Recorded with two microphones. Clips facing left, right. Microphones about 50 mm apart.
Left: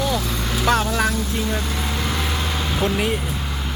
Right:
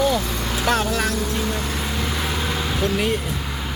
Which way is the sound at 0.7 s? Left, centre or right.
Centre.